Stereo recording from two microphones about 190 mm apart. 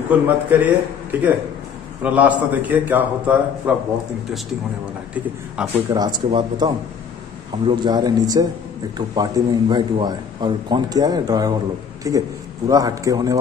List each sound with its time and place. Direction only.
0.1 s a man's voice: 10° right (ahead or behind)
5.1 s a man's voice: 5° right (ahead or behind)
5.9 s a man's voice: 20° right (ahead or behind)